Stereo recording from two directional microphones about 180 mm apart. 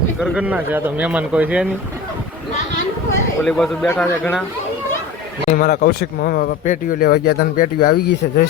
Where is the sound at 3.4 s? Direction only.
Centre (ahead or behind).